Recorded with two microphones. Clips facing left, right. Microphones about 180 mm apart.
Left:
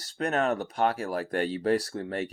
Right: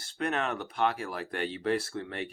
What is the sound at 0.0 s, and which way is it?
Speech, 40° left (ahead or behind).